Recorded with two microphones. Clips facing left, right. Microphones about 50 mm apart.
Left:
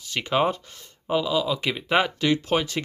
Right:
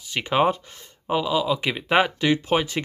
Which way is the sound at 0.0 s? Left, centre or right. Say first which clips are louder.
Right 2 dB; centre.